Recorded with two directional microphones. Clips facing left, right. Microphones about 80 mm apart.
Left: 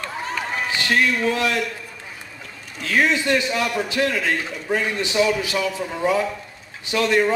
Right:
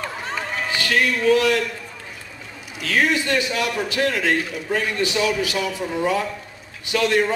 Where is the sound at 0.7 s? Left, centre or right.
Left.